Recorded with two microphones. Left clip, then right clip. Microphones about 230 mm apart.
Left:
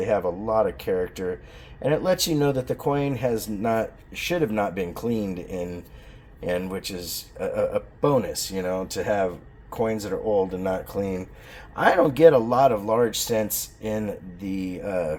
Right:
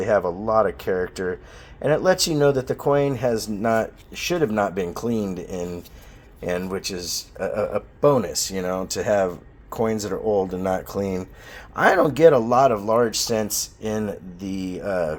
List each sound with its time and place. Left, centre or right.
0.0 s speech: right